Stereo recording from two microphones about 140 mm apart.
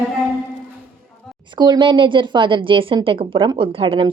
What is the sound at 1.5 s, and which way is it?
A woman's voice, 35° right (ahead or behind).